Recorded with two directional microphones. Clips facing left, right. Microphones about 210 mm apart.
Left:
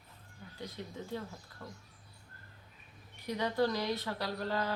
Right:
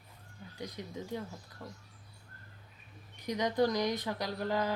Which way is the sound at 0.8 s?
15° right (ahead or behind).